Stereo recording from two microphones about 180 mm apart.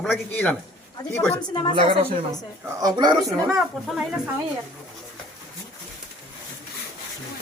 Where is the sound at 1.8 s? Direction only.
30° right (ahead or behind).